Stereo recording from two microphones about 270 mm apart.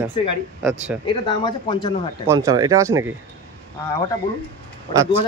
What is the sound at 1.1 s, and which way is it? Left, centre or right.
Speech, centre.